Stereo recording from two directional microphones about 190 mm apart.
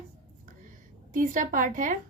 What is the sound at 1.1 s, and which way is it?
Speech, 45° right (ahead or behind).